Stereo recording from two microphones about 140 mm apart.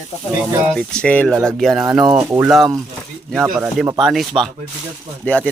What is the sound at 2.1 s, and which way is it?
Speech, 15° right (ahead or behind).